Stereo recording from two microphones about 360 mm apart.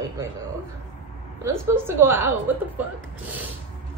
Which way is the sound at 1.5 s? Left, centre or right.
Centre.